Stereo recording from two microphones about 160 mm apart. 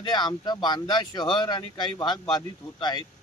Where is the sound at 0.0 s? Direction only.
25° left (ahead or behind).